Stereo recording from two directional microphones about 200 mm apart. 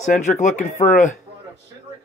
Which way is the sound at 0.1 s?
35° left (ahead or behind).